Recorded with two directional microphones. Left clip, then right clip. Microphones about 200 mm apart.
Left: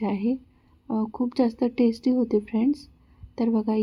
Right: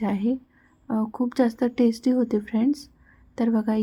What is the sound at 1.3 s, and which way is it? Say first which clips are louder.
A woman's voice: right 1 dB; 45° right (ahead or behind).